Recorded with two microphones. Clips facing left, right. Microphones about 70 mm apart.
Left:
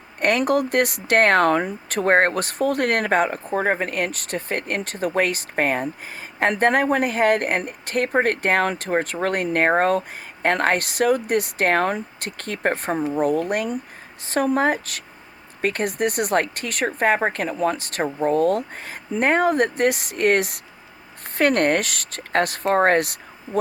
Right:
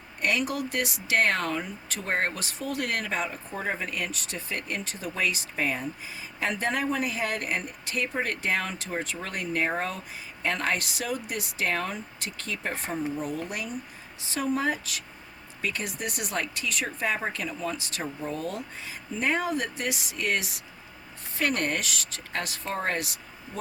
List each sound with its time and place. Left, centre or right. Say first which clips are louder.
0.2 s speech: left 9 dB; left